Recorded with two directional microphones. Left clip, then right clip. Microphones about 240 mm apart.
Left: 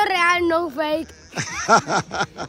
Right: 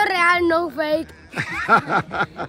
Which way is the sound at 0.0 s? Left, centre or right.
Centre.